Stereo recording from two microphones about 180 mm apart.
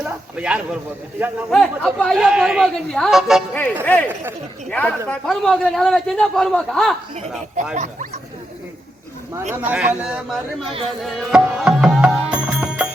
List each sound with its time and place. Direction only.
0.0 s a man's voice: 5° right (ahead or behind)
7.8 s speech: 40° right (ahead or behind)
9.6 s speech: 10° right (ahead or behind)
10.7 s speech: 30° right (ahead or behind)
11.0 s music: centre (ahead or behind)